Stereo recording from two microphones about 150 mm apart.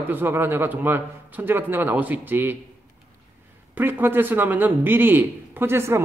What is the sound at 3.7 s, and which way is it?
Speech, 15° right (ahead or behind).